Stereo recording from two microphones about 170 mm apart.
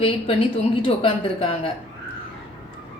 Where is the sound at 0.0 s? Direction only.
30° left (ahead or behind).